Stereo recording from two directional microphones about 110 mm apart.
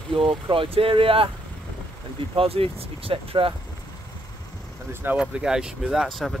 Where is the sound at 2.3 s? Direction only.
60° right (ahead or behind).